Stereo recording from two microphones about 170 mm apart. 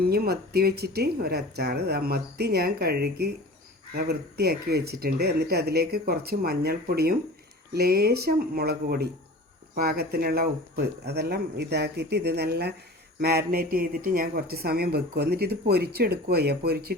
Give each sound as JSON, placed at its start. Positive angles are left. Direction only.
{"t": 0.0, "sound": "speech", "side_deg": -65}